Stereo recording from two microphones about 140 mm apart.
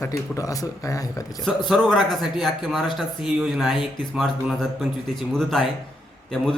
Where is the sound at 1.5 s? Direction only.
Centre (ahead or behind).